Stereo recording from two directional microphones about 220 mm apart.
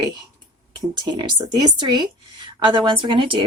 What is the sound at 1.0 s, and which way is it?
A woman's voice, 20° right (ahead or behind).